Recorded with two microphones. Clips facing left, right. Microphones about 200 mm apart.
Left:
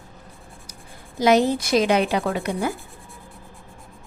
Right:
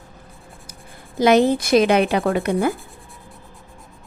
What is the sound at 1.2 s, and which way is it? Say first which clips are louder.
Speech: right 3 dB; 55° right (ahead or behind).